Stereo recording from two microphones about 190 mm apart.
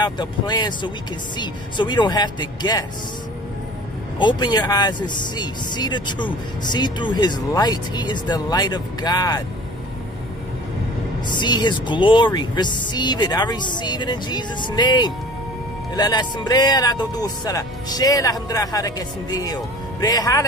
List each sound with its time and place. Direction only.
0.0 s speech: 20° left (ahead or behind)
4.2 s speech: 25° left (ahead or behind)
11.2 s speech: 25° left (ahead or behind)